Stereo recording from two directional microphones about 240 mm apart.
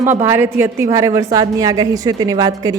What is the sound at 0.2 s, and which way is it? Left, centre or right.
A woman's voice, centre.